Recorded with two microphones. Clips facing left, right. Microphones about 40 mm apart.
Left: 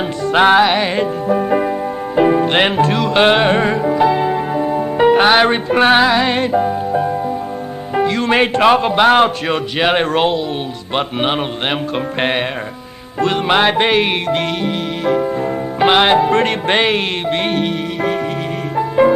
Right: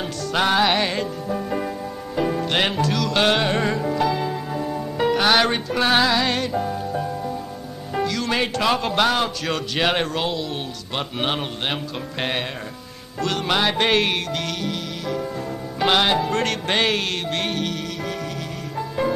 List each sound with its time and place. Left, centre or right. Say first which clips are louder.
0.3 s music: left 9 dB; left
0.7 s music: left 5 dB; centre
0.9 s speech: left 9 dB; left
7.9 s music: left 8 dB; left
9.8 s speech: left 6 dB; left
10.1 s music: left 9 dB; left
13.8 s speech: left 5 dB; centre
14.3 s music: left 8 dB; left